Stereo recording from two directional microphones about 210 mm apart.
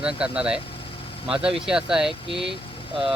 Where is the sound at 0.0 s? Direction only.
5° right (ahead or behind).